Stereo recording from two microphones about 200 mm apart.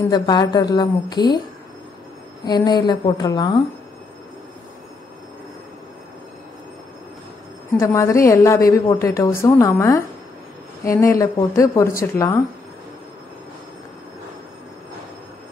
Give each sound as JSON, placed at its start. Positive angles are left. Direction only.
{"t": 0.1, "sound": "a woman's voice", "side_deg": 20}
{"t": 2.4, "sound": "a woman's voice", "side_deg": 20}
{"t": 7.7, "sound": "a woman's voice", "side_deg": 15}